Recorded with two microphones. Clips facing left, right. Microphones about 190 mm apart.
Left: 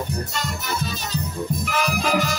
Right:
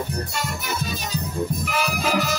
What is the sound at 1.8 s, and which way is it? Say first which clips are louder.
Music: left 1 dB; 5° right (ahead or behind).